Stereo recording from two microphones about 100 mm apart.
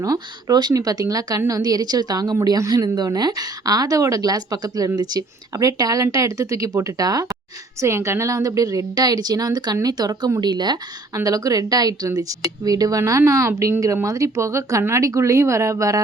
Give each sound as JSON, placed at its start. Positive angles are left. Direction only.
{"t": 0.0, "sound": "a woman's voice", "side_deg": -35}